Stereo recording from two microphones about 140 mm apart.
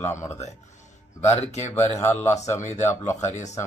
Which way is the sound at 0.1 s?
20° left (ahead or behind).